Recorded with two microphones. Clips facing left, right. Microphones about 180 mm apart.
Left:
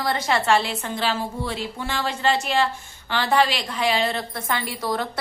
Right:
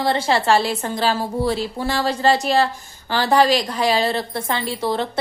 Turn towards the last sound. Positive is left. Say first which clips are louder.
# right 4 dB
turn(degrees=-25)  # may be behind; listen again after turning